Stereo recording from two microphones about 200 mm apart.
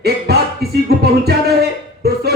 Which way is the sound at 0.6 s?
55° right (ahead or behind).